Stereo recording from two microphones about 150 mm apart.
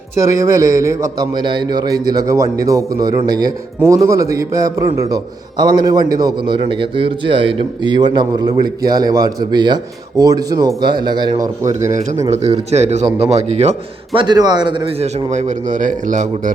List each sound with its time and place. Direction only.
0.2 s a man's voice: 20° right (ahead or behind)
12.7 s a man's voice: 50° right (ahead or behind)